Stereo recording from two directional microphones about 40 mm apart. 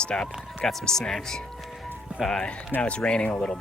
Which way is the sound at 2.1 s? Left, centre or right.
Right.